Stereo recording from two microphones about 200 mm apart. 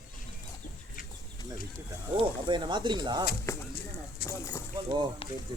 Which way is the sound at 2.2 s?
25° right (ahead or behind).